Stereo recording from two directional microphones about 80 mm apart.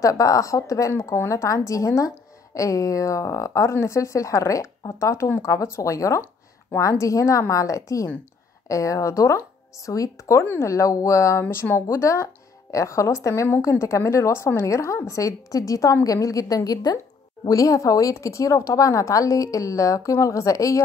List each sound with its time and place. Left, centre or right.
0.0 s a woman's voice: left
10.4 s speech: left
10.7 s a woman's voice: left